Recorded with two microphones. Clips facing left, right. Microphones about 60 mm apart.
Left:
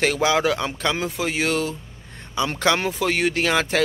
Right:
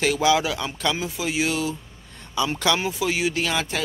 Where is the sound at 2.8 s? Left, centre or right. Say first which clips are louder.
Left 2 dB; left.